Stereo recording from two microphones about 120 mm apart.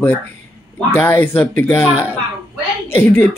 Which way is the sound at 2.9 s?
20° left (ahead or behind).